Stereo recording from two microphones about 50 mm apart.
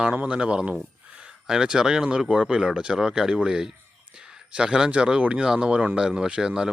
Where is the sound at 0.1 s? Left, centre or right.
Right.